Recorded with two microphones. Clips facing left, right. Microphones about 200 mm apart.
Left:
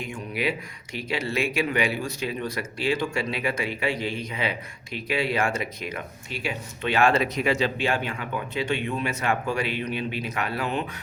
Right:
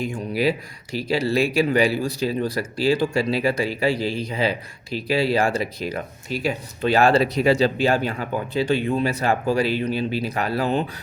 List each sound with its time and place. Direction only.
0.0 s speech: 35° right (ahead or behind)